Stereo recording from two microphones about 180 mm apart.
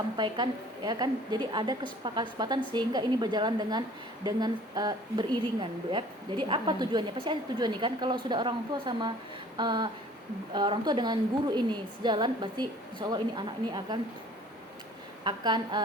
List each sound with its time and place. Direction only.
0.9 s a woman's voice: 25° right (ahead or behind)
15.2 s a woman's voice: 25° right (ahead or behind)